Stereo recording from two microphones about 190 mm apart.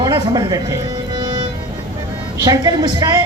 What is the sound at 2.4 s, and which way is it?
Speech, 20° right (ahead or behind).